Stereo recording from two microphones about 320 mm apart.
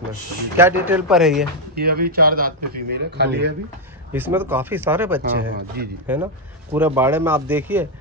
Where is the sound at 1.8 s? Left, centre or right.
Right.